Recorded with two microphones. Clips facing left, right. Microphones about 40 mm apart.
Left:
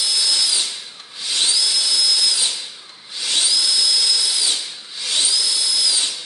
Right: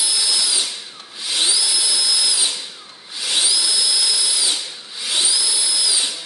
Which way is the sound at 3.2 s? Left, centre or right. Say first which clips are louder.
Even; centre.